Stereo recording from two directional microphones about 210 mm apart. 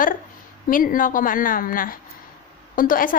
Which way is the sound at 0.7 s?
40° left (ahead or behind).